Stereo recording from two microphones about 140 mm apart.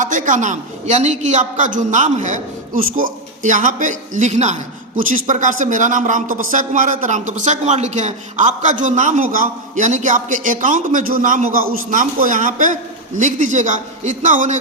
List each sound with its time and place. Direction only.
0.0 s a woman's voice: 65° right (ahead or behind)